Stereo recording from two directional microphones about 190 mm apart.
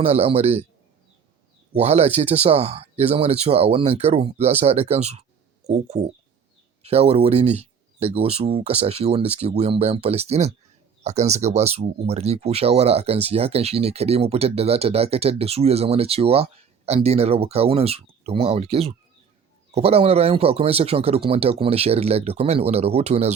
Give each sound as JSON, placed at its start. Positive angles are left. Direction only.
{"t": 0.0, "sound": "speech", "side_deg": -30}
{"t": 1.7, "sound": "speech", "side_deg": -35}